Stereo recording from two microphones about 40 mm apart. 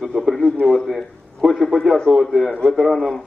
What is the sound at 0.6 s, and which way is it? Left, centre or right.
A man's voice, centre.